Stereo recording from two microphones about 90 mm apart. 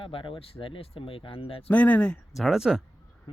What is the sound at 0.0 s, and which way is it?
Speech, 75° left (ahead or behind).